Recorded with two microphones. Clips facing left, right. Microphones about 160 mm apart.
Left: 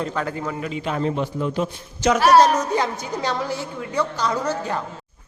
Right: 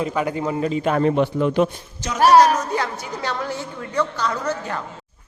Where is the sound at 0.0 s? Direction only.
10° right (ahead or behind).